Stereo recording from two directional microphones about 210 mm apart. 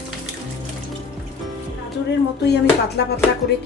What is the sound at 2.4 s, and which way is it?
Speech, 50° left (ahead or behind).